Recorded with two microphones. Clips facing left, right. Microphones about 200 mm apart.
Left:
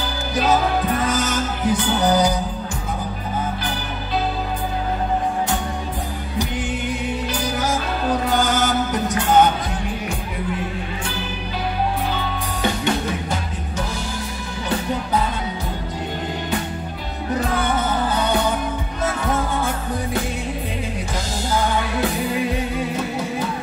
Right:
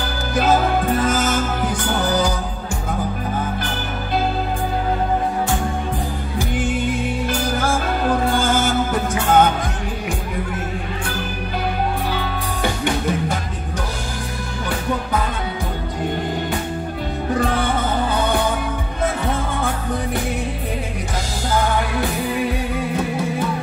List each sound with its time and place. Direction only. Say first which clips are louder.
1.0 s music: right 2 dB; 50° right (ahead or behind)
8.4 s music: right 1 dB; 15° left (ahead or behind)